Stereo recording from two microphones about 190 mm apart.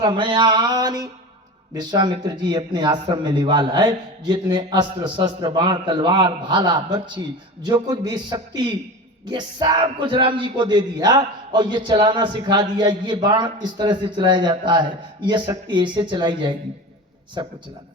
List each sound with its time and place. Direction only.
0.0 s speech: 25° right (ahead or behind)